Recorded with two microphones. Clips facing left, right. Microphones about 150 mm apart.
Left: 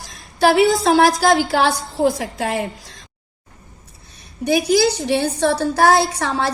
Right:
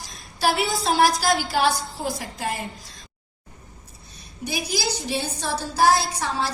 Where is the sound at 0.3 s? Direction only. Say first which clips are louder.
Left 9 dB; 55° left (ahead or behind).